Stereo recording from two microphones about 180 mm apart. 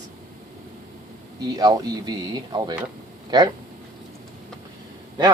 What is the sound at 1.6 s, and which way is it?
Speech, 20° right (ahead or behind).